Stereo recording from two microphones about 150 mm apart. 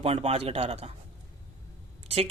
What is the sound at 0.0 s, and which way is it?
Speech, 40° right (ahead or behind).